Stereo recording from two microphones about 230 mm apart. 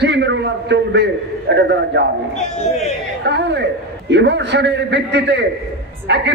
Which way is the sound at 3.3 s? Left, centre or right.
Right.